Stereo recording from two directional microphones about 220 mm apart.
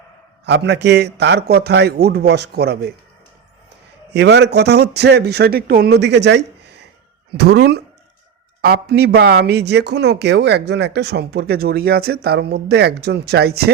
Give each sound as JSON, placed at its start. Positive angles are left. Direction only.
{"t": 0.4, "sound": "speech", "side_deg": -50}
{"t": 4.1, "sound": "speech", "side_deg": -50}